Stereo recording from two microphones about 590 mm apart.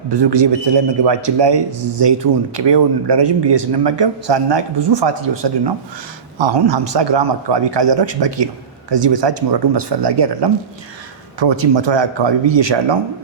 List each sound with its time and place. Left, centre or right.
0.1 s a man's voice: right